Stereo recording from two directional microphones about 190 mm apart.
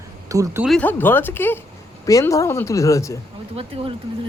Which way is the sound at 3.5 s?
30° right (ahead or behind).